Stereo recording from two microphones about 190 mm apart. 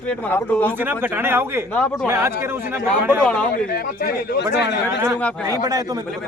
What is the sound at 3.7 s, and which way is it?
Speech, 55° left (ahead or behind).